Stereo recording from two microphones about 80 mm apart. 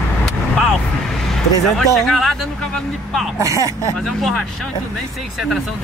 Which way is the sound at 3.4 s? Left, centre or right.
Right.